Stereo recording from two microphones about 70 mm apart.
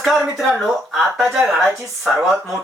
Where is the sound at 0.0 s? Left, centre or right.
Centre.